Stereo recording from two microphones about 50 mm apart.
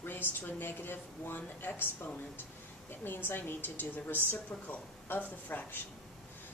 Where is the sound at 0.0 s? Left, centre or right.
Left.